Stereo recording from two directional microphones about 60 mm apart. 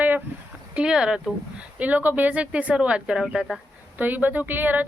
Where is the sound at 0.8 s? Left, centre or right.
Centre.